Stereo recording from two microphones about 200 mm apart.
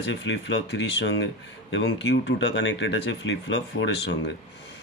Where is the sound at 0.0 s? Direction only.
65° left (ahead or behind).